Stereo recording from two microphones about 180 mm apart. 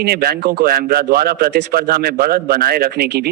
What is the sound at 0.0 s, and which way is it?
A man's voice, 60° right (ahead or behind).